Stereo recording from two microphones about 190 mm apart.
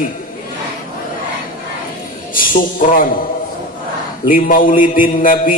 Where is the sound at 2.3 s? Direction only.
45° left (ahead or behind).